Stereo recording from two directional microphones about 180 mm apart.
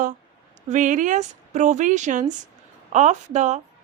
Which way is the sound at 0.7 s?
45° right (ahead or behind).